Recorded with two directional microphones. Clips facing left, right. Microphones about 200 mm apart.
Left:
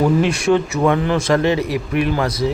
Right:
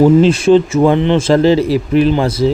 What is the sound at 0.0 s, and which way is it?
Speech, 30° right (ahead or behind).